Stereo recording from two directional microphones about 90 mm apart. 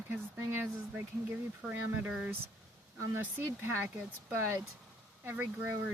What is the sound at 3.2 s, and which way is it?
Speech, 25° right (ahead or behind).